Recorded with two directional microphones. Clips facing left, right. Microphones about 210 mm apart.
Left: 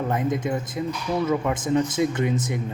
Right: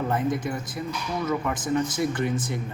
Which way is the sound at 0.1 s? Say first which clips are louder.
Left 2 dB; 20° left (ahead or behind).